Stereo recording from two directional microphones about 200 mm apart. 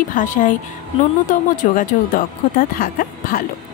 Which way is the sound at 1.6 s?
40° left (ahead or behind).